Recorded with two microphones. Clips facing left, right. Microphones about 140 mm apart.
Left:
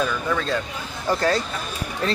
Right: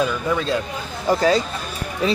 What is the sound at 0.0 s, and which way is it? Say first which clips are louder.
Speech: right 3 dB; 15° right (ahead or behind).